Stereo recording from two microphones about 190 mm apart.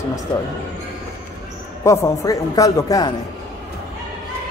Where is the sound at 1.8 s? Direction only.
15° left (ahead or behind).